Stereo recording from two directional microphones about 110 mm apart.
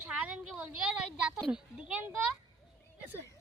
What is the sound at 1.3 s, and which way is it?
Speech, 5° left (ahead or behind).